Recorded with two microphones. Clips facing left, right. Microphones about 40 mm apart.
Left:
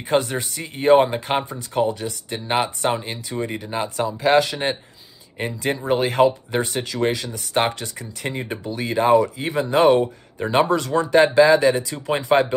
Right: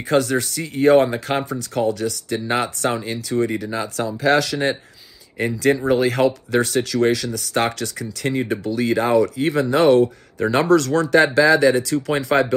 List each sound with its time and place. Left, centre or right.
0.1 s speech: left